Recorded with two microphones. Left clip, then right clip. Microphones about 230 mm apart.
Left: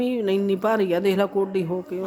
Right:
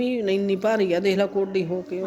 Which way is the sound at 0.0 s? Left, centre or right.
Left.